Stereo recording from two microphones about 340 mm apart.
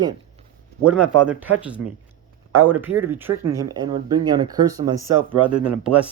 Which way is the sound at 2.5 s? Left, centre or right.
Centre.